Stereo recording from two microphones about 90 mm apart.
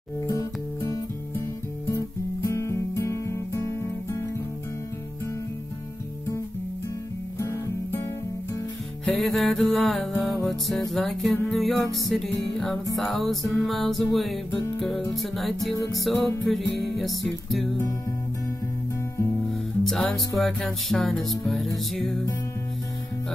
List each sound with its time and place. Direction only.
0.3 s music: 40° left (ahead or behind)
7.3 s music: 35° left (ahead or behind)
9.0 s music: centre (ahead or behind)
19.8 s music: 5° left (ahead or behind)